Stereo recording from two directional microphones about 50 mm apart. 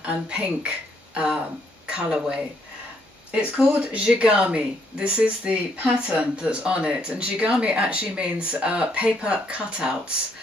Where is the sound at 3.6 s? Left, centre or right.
Right.